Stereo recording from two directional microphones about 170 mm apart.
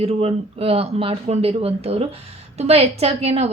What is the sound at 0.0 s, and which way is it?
A woman's voice, 35° right (ahead or behind).